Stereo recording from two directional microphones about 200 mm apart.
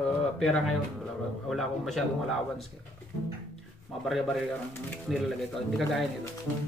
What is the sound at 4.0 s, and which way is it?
Speech, centre (ahead or behind).